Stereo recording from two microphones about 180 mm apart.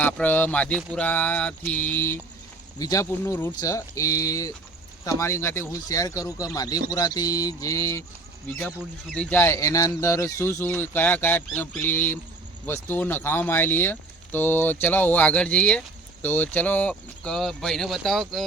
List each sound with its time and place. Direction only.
0.0 s speech: 10° left (ahead or behind)
9.1 s speech: 5° left (ahead or behind)